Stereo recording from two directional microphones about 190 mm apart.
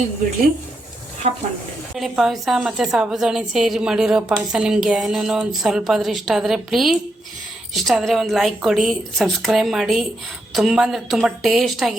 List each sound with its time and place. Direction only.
1.2 s speech: 35° right (ahead or behind)
2.0 s a woman's voice: centre (ahead or behind)